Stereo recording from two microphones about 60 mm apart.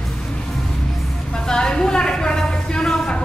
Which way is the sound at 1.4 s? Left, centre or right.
Centre.